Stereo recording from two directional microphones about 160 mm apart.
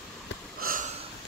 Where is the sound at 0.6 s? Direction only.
60° right (ahead or behind).